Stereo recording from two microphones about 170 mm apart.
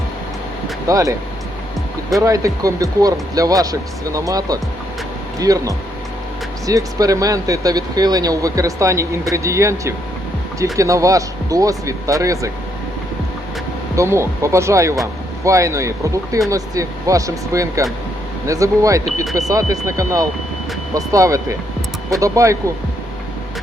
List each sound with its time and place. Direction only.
0.9 s speech: 20° right (ahead or behind)
2.1 s speech: 20° right (ahead or behind)
13.9 s speech: 15° right (ahead or behind)